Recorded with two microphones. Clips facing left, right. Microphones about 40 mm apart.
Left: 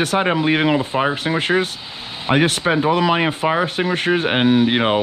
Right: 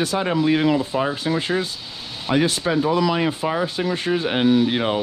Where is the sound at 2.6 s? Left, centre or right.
Left.